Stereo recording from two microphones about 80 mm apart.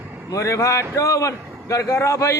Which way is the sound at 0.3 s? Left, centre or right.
Left.